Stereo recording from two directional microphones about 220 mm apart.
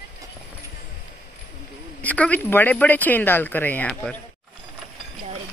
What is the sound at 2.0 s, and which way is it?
Speech, 5° left (ahead or behind).